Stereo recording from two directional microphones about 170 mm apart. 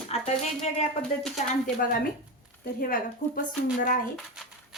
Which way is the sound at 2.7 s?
55° left (ahead or behind).